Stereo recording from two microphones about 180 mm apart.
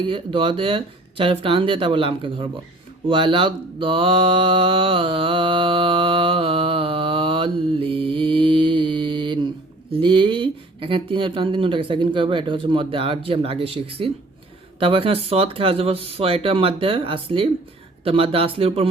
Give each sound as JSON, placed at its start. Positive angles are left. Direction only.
{"t": 0.1, "sound": "speech", "side_deg": -30}
{"t": 3.1, "sound": "mantra", "side_deg": -30}
{"t": 9.9, "sound": "speech", "side_deg": -25}